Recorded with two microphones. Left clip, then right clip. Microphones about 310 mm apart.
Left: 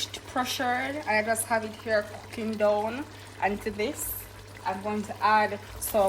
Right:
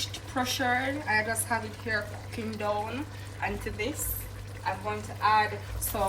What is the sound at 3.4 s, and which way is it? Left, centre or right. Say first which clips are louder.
Speech: left 5 dB; left.